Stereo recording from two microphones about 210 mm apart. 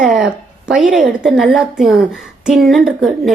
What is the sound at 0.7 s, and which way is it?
A woman's voice, 5° right (ahead or behind).